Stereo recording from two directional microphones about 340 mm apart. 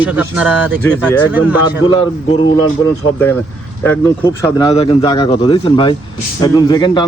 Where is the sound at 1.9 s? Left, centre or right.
Centre.